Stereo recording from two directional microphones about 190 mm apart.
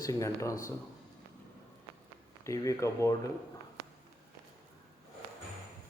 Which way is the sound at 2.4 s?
15° left (ahead or behind).